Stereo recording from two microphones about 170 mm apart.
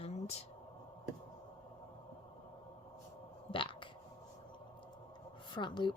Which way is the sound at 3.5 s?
30° left (ahead or behind).